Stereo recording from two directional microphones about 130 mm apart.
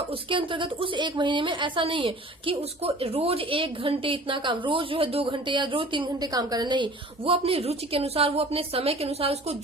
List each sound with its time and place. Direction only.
0.1 s a woman's voice: 40° right (ahead or behind)